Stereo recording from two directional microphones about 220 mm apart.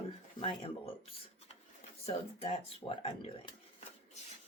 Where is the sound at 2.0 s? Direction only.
25° left (ahead or behind).